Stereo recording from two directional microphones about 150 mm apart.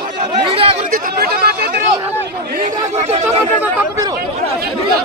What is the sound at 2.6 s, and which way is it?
Speech, 50° right (ahead or behind).